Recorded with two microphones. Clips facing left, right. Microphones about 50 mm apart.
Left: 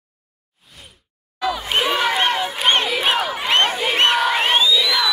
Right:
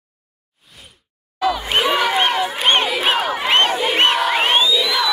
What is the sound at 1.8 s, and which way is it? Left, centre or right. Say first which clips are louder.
Crowd: right 1 dB; right.